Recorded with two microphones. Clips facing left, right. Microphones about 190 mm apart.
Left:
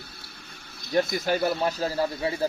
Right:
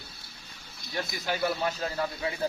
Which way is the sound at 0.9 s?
50° left (ahead or behind).